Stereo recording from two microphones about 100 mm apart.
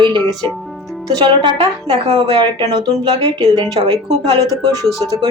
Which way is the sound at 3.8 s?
90° right.